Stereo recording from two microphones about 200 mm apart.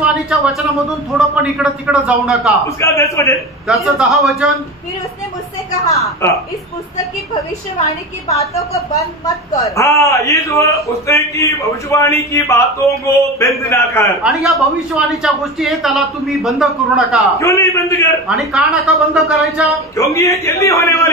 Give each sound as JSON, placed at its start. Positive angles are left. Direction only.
{"t": 0.0, "sound": "a man's voice", "side_deg": -5}
{"t": 2.8, "sound": "a man's voice", "side_deg": 15}
{"t": 3.6, "sound": "a man's voice", "side_deg": 0}
{"t": 5.9, "sound": "a man's voice", "side_deg": 15}
{"t": 8.5, "sound": "a man's voice", "side_deg": 15}
{"t": 14.6, "sound": "a man's voice", "side_deg": 0}
{"t": 17.4, "sound": "a man's voice", "side_deg": 15}
{"t": 18.3, "sound": "a man's voice", "side_deg": 0}
{"t": 20.0, "sound": "a man's voice", "side_deg": 15}